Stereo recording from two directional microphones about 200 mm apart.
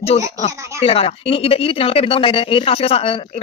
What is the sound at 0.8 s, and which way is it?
Speech, 30° left (ahead or behind).